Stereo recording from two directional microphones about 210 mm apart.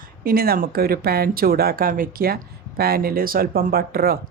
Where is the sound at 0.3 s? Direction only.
45° right (ahead or behind).